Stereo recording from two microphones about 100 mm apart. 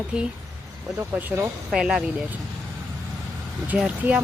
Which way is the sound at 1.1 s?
20° right (ahead or behind).